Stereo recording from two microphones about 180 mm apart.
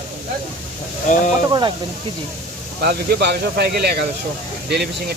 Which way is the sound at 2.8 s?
65° right (ahead or behind).